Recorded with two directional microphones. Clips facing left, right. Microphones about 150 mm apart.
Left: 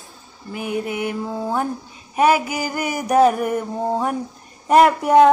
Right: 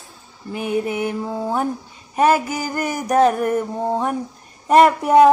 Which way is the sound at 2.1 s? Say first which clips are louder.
Even; 10° left (ahead or behind).